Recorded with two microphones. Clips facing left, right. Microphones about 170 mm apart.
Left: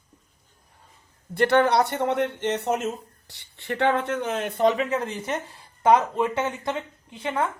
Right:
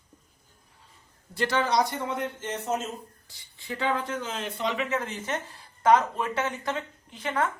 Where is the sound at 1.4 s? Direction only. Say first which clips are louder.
Left 6 dB; 60° left (ahead or behind); by 4.9 s 40° left (ahead or behind).